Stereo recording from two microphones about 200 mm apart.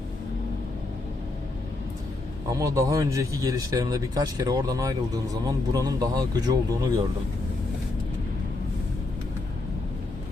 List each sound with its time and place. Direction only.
2.5 s a man's voice: 15° right (ahead or behind)